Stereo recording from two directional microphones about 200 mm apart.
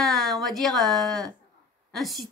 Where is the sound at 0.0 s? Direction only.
Centre (ahead or behind).